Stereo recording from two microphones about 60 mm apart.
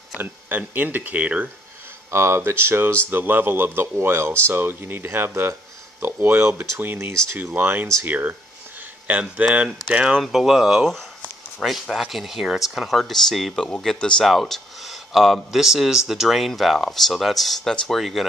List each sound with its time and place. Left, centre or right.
0.2 s speech: right
2.0 s a man's voice: right
5.5 s a sound: right
6.3 s speech: right
6.8 s a man's voice: right
9.7 s speech: centre
11.9 s speech: centre
14.2 s speech: centre